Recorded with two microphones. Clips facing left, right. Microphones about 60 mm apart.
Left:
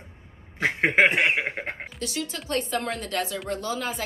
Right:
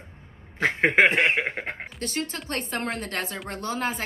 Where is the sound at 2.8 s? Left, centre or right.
Right.